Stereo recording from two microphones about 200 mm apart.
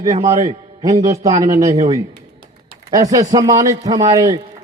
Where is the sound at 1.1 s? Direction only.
15° right (ahead or behind).